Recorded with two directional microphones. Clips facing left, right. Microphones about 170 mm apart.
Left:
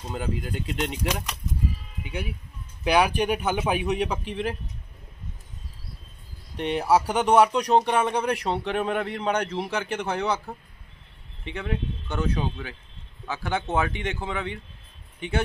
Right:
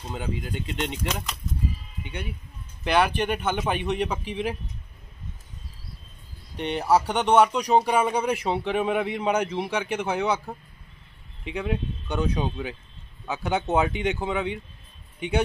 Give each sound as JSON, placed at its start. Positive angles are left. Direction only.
{"t": 0.1, "sound": "speech", "side_deg": 0}
{"t": 6.5, "sound": "speech", "side_deg": 0}
{"t": 13.7, "sound": "speech", "side_deg": -20}